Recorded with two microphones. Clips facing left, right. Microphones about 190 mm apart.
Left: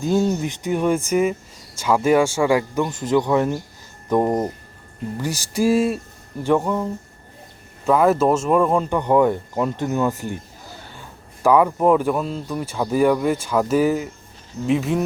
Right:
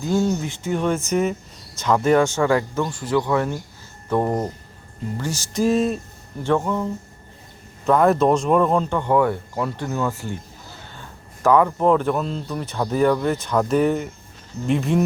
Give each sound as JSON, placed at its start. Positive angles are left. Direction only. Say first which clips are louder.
{"t": 0.0, "sound": "speech", "louder": "left 2 dB", "side_deg": 20}
{"t": 7.9, "sound": "speech", "louder": "even", "side_deg": 5}
{"t": 11.4, "sound": "speech", "louder": "left 1 dB", "side_deg": 10}